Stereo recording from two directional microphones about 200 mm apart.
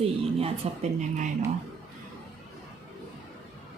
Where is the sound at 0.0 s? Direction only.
30° right (ahead or behind).